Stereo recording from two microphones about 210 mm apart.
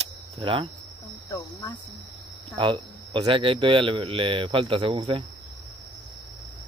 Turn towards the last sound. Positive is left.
turn(degrees=-25)  # may be behind; listen again after turning